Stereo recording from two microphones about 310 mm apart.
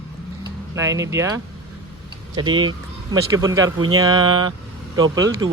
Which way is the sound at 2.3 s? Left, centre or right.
Centre.